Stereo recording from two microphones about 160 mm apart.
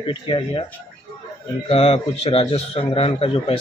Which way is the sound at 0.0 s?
35° left (ahead or behind).